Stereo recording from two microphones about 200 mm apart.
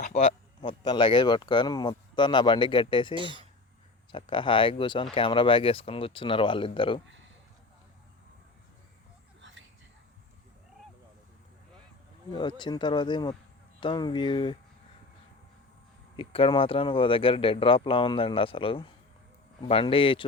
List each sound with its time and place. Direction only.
0.0 s speech: 30° left (ahead or behind)
3.2 s speech: 25° right (ahead or behind)
4.1 s speech: 25° left (ahead or behind)
9.4 s whispering: 65° right (ahead or behind)
12.3 s speech: 20° left (ahead or behind)
16.1 s speech: 25° left (ahead or behind)